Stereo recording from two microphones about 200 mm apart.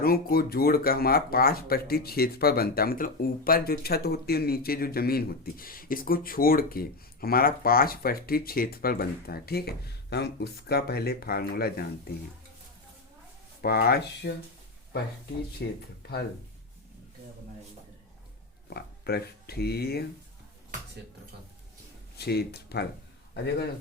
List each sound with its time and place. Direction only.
0.0 s speech: 50° left (ahead or behind)
13.6 s speech: 50° left (ahead or behind)
15.6 s speech: 55° left (ahead or behind)
18.7 s speech: 50° left (ahead or behind)
22.2 s speech: 55° left (ahead or behind)